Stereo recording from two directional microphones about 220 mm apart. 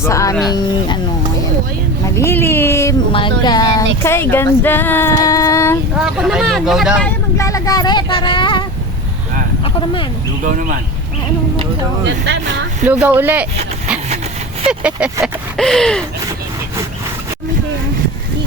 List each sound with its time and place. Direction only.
0.0 s speech: 15° left (ahead or behind)
2.1 s speech: 10° left (ahead or behind)
3.1 s speech: 20° left (ahead or behind)
4.0 s female singing: 10° left (ahead or behind)
6.0 s speech: centre (ahead or behind)
7.3 s speech: 15° left (ahead or behind)
10.4 s speech: 40° right (ahead or behind)
12.0 s speech: 50° right (ahead or behind)
12.9 s speech: 10° right (ahead or behind)
14.7 s speech: 5° right (ahead or behind)